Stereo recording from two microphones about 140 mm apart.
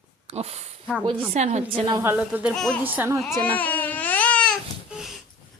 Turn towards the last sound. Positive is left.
turn(degrees=0)  # may be behind; listen again after turning